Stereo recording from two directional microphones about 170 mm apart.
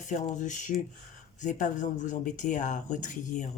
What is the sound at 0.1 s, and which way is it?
A woman's voice, 45° left (ahead or behind).